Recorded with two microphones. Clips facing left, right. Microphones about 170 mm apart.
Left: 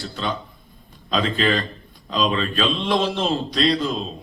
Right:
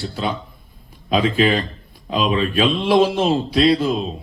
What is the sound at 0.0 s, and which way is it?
A man's voice, 10° right (ahead or behind).